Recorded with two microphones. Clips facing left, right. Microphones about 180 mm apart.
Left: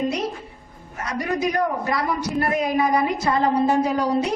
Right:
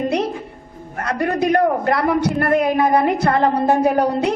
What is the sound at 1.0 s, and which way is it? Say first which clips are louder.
A woman's voice: right 5 dB; 60° right (ahead or behind).